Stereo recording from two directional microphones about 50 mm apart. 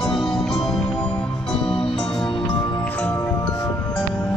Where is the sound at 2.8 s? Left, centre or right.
Left.